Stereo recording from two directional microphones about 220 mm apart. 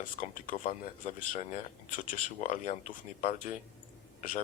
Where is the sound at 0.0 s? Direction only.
35° left (ahead or behind).